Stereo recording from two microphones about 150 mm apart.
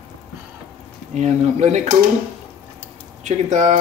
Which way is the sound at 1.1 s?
50° right (ahead or behind).